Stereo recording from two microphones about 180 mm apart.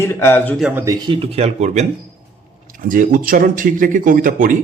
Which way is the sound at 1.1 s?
35° right (ahead or behind).